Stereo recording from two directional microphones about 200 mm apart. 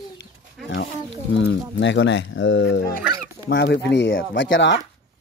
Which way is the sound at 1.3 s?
65° left (ahead or behind).